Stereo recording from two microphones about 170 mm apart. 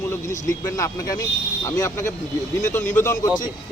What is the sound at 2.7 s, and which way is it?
Speech, 45° left (ahead or behind).